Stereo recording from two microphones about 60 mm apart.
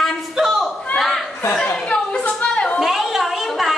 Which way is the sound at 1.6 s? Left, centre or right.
Left.